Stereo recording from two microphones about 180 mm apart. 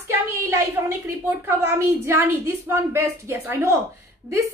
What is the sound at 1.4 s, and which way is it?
A woman's voice, 15° right (ahead or behind).